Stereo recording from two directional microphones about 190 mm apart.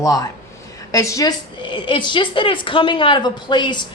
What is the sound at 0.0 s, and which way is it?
A woman's voice, 15° left (ahead or behind).